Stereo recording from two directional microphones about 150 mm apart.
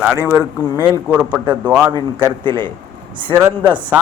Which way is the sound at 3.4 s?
10° right (ahead or behind).